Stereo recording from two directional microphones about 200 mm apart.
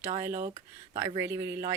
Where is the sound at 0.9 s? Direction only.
20° right (ahead or behind).